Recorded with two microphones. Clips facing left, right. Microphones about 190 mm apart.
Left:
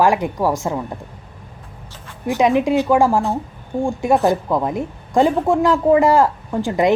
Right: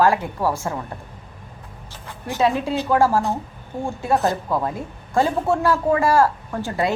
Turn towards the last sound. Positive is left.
turn(degrees=15)  # may be behind; listen again after turning